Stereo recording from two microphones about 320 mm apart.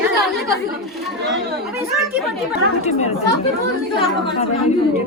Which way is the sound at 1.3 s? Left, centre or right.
Right.